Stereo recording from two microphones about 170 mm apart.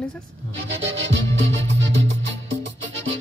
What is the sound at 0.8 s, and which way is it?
Music, 90° right.